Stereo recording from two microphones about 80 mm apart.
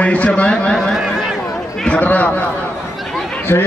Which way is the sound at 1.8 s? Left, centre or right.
Centre.